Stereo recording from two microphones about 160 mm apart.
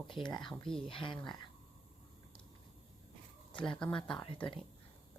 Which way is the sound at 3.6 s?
5° left (ahead or behind).